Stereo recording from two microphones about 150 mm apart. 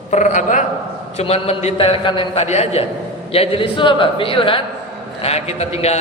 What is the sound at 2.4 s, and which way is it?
Mantra, 45° left (ahead or behind).